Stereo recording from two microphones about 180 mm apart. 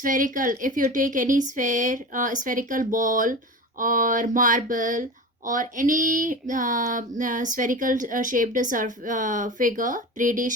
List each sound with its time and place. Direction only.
0.0 s speech: 50° right (ahead or behind)